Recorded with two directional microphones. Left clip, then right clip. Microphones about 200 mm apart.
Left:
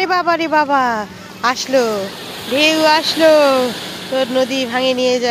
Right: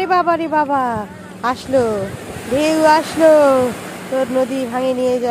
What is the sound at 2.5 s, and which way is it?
Speech, 20° right (ahead or behind).